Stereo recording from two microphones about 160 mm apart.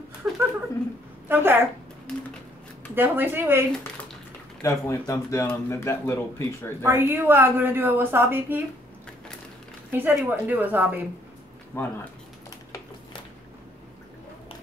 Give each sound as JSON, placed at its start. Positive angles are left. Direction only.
{"t": 0.2, "sound": "a sound", "side_deg": -10}
{"t": 1.3, "sound": "a woman's voice", "side_deg": -15}
{"t": 2.9, "sound": "a woman's voice", "side_deg": -15}
{"t": 4.6, "sound": "speech", "side_deg": 20}
{"t": 6.8, "sound": "a woman's voice", "side_deg": -15}
{"t": 9.9, "sound": "a woman's voice", "side_deg": -10}
{"t": 11.7, "sound": "a sound", "side_deg": 15}